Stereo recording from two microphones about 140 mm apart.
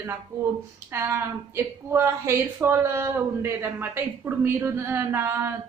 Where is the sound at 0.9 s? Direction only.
20° right (ahead or behind).